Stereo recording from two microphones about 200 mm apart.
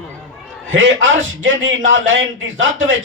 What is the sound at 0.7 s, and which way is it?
A man's voice, 75° right (ahead or behind).